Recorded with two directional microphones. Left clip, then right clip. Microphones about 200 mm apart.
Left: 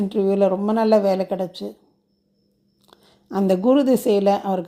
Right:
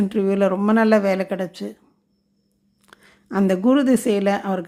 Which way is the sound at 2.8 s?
15° right (ahead or behind).